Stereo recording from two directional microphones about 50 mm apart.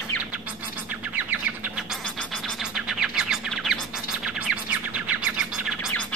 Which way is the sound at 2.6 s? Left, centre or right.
Centre.